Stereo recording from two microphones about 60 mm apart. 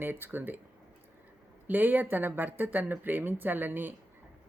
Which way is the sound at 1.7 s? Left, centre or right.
Right.